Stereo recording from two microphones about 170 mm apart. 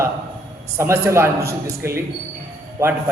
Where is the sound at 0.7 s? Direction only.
15° right (ahead or behind).